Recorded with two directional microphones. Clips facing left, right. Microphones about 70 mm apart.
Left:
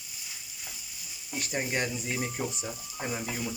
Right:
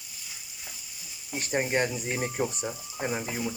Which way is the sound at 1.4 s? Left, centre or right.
Right.